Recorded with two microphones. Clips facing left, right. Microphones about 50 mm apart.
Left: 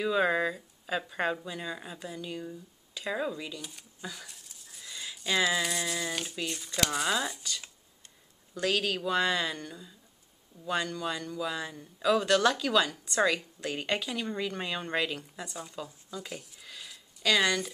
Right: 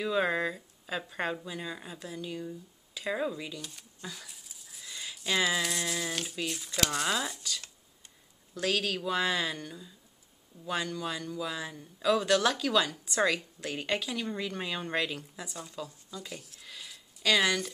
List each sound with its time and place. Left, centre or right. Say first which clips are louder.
0.0 s a man's voice: left 2 dB; centre
16.1 s speech: left 2 dB; centre
16.3 s a sound: left 1 dB; centre